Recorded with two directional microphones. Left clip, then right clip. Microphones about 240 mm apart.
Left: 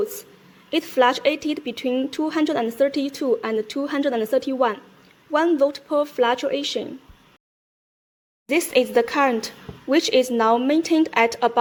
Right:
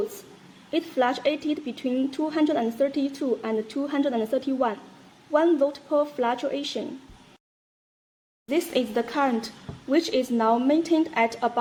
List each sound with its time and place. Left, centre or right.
0.7 s speech: left
8.4 s speech: left